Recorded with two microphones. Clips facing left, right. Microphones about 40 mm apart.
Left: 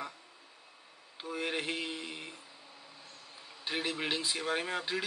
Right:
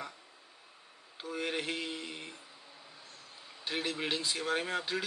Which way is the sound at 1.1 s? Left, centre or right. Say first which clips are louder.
Even; centre.